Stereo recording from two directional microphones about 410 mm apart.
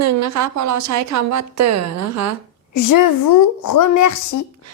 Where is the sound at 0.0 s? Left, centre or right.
Right.